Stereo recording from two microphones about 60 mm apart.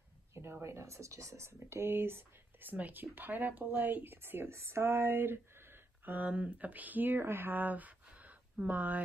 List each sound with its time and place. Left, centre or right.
0.3 s speech: right